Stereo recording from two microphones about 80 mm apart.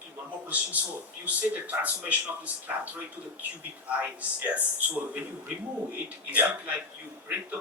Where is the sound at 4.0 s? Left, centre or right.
Centre.